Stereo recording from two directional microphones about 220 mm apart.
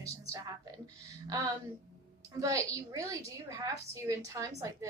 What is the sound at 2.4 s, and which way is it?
A woman's voice, 15° right (ahead or behind).